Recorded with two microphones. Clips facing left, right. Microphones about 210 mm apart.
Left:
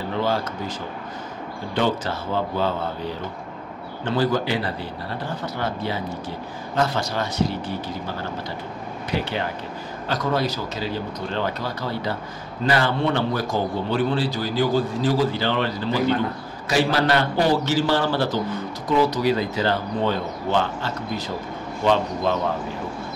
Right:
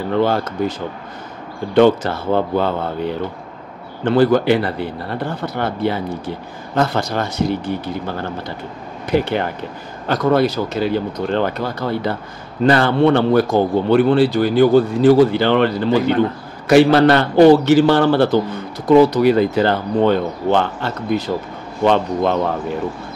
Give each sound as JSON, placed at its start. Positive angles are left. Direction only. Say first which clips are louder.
{"t": 0.2, "sound": "a man's voice", "louder": "right 7 dB", "side_deg": -60}
{"t": 1.8, "sound": "a man's voice", "louder": "right 11 dB", "side_deg": -60}
{"t": 9.1, "sound": "a man's voice", "louder": "right 8 dB", "side_deg": -55}